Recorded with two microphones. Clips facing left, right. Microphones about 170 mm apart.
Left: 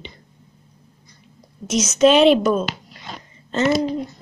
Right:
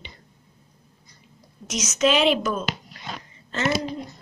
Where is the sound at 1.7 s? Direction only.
30° left (ahead or behind).